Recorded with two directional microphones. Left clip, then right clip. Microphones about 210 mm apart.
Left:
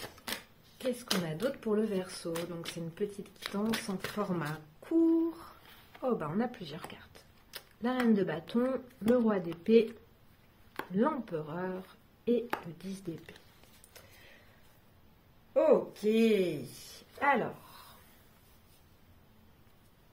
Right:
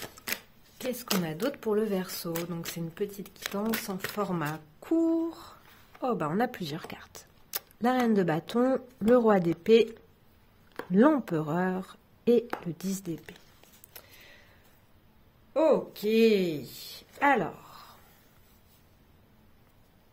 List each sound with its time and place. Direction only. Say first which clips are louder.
0.7 s a woman's voice: right 2 dB; 40° right (ahead or behind)
11.0 s a woman's voice: right 8 dB; 50° right (ahead or behind)
15.5 s speech: right 2 dB; 30° right (ahead or behind)
17.1 s speech: right 4 dB; 45° right (ahead or behind)